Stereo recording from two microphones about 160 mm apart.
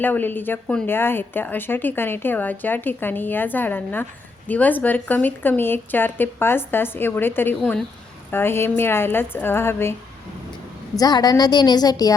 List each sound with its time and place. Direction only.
0.0 s a woman's voice: 10° left (ahead or behind)
7.6 s a woman's voice: centre (ahead or behind)
8.3 s a woman's voice: 15° left (ahead or behind)
10.9 s a woman's voice: 25° left (ahead or behind)